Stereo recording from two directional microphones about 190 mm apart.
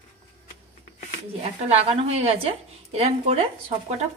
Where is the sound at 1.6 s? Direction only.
35° right (ahead or behind).